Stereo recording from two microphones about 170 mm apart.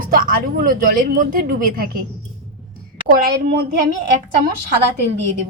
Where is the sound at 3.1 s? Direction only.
55° right (ahead or behind).